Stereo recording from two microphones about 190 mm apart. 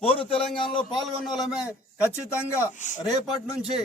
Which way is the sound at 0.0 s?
30° left (ahead or behind).